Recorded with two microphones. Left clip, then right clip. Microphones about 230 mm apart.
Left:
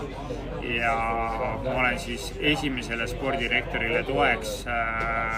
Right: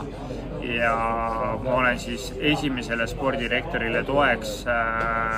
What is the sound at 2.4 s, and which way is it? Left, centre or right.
A man's voice, centre.